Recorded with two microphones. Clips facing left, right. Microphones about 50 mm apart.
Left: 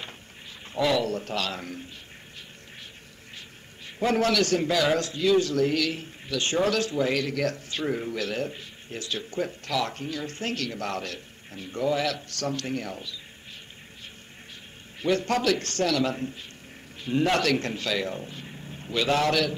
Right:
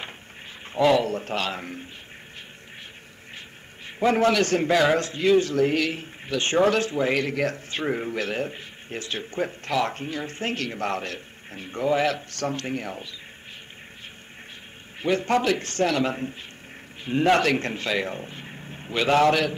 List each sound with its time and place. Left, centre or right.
0.7 s a man's voice: right
3.3 s a man's voice: right
15.0 s a man's voice: right